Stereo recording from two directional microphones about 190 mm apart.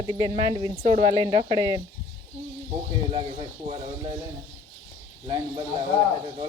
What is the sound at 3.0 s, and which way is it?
Speech, 25° right (ahead or behind).